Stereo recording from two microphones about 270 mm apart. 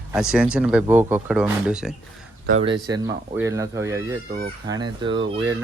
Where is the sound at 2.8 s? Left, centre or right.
Centre.